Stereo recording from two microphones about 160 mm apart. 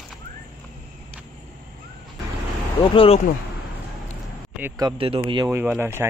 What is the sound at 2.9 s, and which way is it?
Speech, 35° left (ahead or behind).